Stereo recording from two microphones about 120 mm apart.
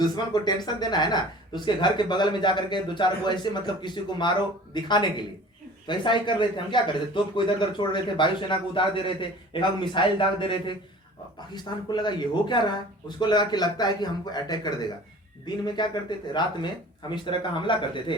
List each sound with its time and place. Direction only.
0.0 s a man's voice: 35° left (ahead or behind)